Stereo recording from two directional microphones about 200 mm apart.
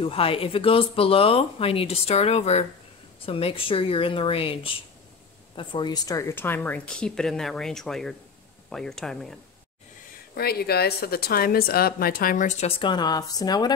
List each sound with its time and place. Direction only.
0.0 s speech: 30° left (ahead or behind); by 9.4 s centre (ahead or behind)
10.3 s a woman's voice: 50° left (ahead or behind); by 13.7 s 20° left (ahead or behind)